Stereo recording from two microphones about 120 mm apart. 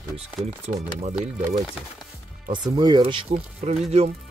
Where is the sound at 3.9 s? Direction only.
65° right (ahead or behind).